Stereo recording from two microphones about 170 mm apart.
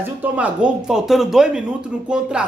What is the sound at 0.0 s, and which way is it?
Speech, 10° right (ahead or behind).